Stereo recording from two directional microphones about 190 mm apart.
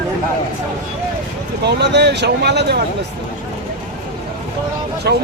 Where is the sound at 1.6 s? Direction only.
65° right (ahead or behind).